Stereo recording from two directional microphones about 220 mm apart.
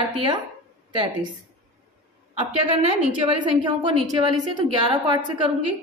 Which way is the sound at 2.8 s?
25° right (ahead or behind).